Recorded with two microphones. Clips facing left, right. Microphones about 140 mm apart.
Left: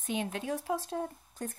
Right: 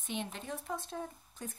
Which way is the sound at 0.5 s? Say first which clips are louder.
Left 6 dB; 80° left.